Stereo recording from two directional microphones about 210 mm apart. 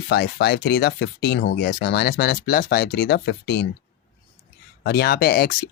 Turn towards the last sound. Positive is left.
turn(degrees=45)  # may be behind; listen again after turning